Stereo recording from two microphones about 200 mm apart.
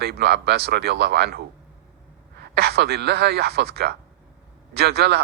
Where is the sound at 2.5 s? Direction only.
55° right (ahead or behind).